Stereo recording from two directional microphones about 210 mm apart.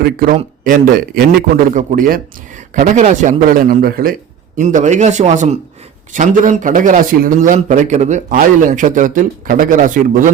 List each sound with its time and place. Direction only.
0.0 s speech: 45° right (ahead or behind)